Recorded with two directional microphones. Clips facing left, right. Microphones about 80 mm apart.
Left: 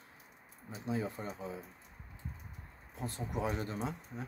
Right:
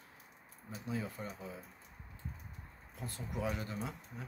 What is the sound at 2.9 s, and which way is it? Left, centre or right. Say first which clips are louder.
Speech: left 4 dB; left.